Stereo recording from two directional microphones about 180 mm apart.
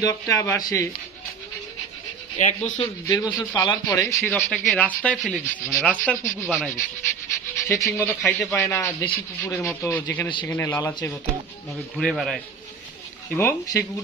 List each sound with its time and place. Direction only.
0.0 s speech: 20° left (ahead or behind)
2.3 s speech: 40° left (ahead or behind)
3.1 s speech: 10° left (ahead or behind)
3.5 s speech: 25° left (ahead or behind)
5.1 s speech: 5° right (ahead or behind)
5.9 s speech: 10° left (ahead or behind)
12.0 s speech: centre (ahead or behind)
13.3 s speech: 15° left (ahead or behind)